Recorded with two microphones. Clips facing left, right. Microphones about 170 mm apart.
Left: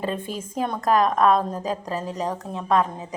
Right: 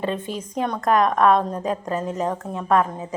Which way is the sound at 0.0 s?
40° left (ahead or behind).